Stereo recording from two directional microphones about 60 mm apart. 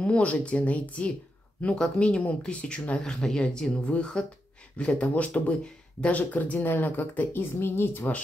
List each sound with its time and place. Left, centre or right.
0.0 s speech: left
3.0 s speech: centre; by 8.1 s left